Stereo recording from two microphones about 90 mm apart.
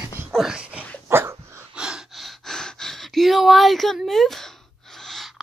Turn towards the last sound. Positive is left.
turn(degrees=5)  # may be behind; listen again after turning